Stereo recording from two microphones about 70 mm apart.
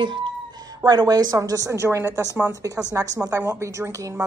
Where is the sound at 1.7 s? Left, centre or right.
Right.